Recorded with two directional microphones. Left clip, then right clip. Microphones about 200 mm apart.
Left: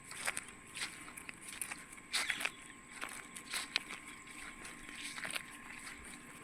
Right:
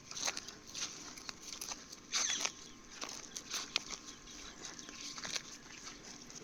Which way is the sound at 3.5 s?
20° left (ahead or behind).